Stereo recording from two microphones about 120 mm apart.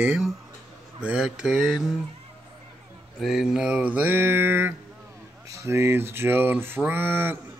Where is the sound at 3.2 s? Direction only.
Centre (ahead or behind).